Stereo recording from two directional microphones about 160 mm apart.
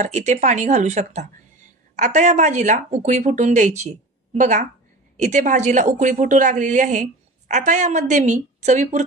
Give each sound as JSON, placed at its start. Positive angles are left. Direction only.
{"t": 0.0, "sound": "a woman's voice", "side_deg": -45}